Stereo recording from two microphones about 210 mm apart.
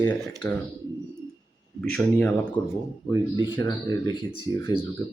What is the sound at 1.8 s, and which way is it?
Speech, 5° left (ahead or behind).